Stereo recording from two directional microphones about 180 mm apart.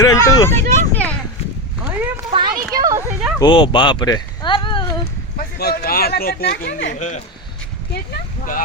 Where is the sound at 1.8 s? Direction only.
10° right (ahead or behind).